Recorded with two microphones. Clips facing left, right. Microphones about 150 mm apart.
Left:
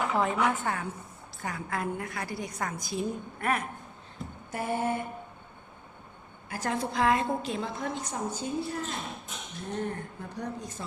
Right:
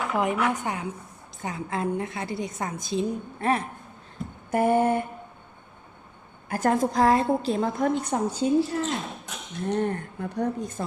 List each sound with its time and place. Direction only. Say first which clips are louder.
0.1 s a woman's voice: right 5 dB; 15° right (ahead or behind); by 3.7 s 30° right (ahead or behind)
4.5 s a sound: right 9 dB; 55° right (ahead or behind)
6.5 s a woman's voice: right 8 dB; 50° right (ahead or behind)
7.8 s speech: right 9 dB; 60° right (ahead or behind)
10.3 s a woman's voice: right 9 dB; 55° right (ahead or behind)